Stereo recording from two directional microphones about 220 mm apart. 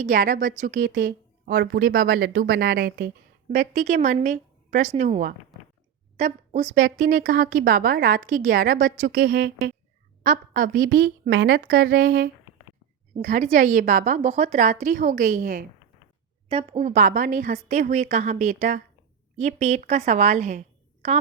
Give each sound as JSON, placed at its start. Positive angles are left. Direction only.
{"t": 0.0, "sound": "a woman's voice", "side_deg": -35}
{"t": 3.5, "sound": "a woman's voice", "side_deg": -35}
{"t": 11.3, "sound": "a woman's voice", "side_deg": -50}
{"t": 16.5, "sound": "a woman's voice", "side_deg": -25}